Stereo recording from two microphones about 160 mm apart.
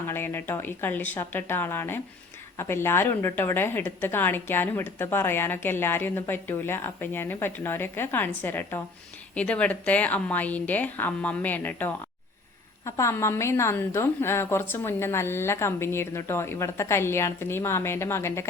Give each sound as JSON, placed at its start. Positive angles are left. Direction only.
{"t": 0.1, "sound": "a woman's voice", "side_deg": 15}